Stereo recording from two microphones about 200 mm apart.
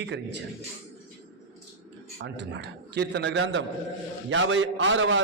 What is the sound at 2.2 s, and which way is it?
A man's voice, 60° right (ahead or behind).